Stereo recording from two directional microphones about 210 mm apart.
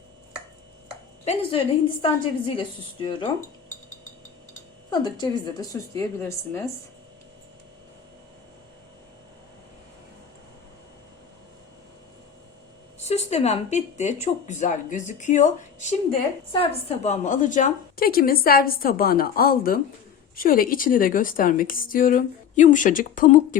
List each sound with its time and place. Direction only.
1.2 s a woman's voice: 30° left (ahead or behind)
4.9 s a woman's voice: 20° left (ahead or behind)
13.0 s a woman's voice: 30° left (ahead or behind)